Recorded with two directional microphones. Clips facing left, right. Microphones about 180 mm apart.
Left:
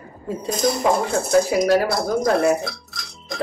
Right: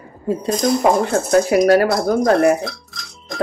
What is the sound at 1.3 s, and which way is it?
Speech, 60° right (ahead or behind).